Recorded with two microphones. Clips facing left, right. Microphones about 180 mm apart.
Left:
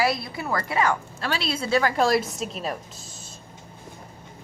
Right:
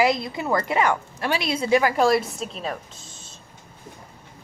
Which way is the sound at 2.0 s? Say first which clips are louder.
Right 2 dB; centre (ahead or behind).